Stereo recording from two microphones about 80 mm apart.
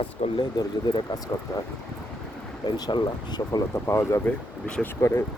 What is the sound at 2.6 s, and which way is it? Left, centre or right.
Speech, left.